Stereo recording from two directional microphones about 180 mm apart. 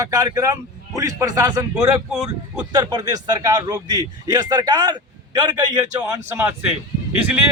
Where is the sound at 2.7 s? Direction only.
25° right (ahead or behind).